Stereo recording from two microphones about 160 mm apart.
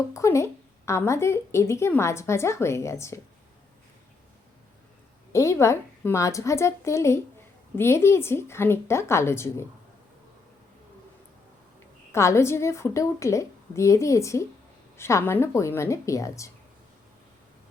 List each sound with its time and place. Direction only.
0.1 s a woman's voice: 20° left (ahead or behind)
5.3 s a woman's voice: 20° left (ahead or behind)
12.1 s a woman's voice: 15° left (ahead or behind)